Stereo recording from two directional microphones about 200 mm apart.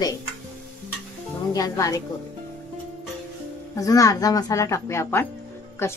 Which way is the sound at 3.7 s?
15° left (ahead or behind).